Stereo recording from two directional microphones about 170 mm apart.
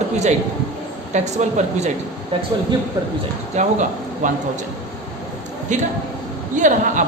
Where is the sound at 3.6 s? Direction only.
45° right (ahead or behind).